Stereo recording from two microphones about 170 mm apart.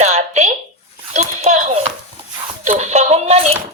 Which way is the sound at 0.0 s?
40° right (ahead or behind).